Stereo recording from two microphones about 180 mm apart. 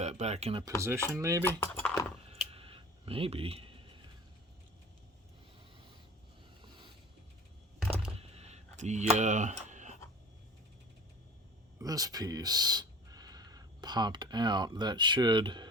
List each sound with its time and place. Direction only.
0.0 s speech: 40° right (ahead or behind)
0.8 s cutlery: 15° right (ahead or behind)
1.5 s speech: 10° left (ahead or behind)
2.5 s computer keyboard: 30° right (ahead or behind)
8.2 s a sound: 35° right (ahead or behind)
11.8 s speech: 20° right (ahead or behind)